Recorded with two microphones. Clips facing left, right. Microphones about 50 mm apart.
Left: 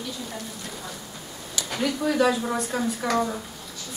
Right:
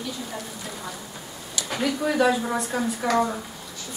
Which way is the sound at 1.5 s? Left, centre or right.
Centre.